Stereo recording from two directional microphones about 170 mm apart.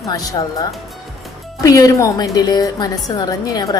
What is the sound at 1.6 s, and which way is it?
A woman's voice, 20° left (ahead or behind).